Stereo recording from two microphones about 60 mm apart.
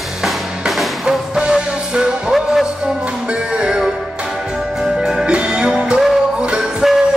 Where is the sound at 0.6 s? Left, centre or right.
Centre.